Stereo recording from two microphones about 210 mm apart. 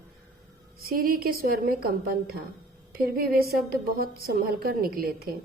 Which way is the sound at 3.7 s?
45° right (ahead or behind).